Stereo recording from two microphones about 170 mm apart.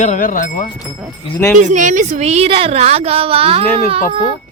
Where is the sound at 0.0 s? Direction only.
50° left (ahead or behind).